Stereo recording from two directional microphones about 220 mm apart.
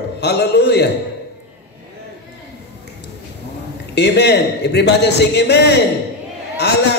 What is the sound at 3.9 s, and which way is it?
A man's voice, 50° left (ahead or behind).